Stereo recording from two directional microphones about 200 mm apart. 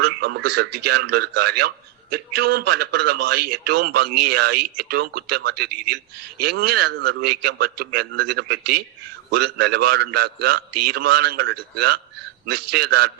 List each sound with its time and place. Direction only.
0.0 s a man's voice: 50° right (ahead or behind)